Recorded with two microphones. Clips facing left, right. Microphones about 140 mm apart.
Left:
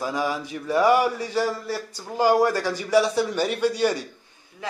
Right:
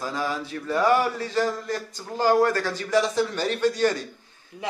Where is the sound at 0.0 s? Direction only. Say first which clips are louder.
Left 2 dB; 15° left (ahead or behind).